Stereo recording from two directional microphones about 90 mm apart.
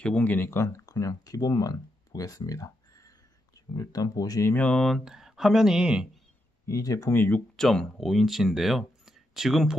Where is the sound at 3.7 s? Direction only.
45° left (ahead or behind).